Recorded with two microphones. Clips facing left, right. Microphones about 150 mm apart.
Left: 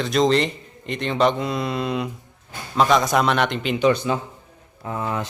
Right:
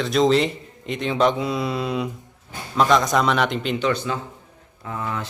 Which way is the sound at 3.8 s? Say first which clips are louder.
Left 4 dB; 20° left (ahead or behind).